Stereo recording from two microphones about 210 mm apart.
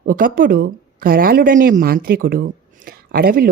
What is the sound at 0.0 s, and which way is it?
A woman's voice, 40° right (ahead or behind).